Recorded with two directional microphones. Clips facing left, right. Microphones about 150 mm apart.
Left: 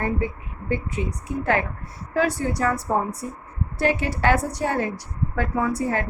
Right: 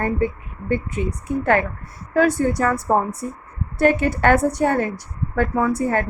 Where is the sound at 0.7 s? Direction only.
50° right (ahead or behind).